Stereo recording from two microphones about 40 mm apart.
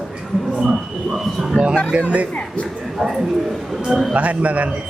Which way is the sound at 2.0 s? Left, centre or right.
Right.